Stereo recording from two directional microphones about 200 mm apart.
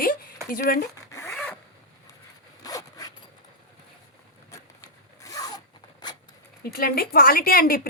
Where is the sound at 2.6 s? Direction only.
20° left (ahead or behind).